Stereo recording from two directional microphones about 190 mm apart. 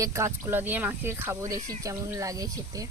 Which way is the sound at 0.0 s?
15° right (ahead or behind).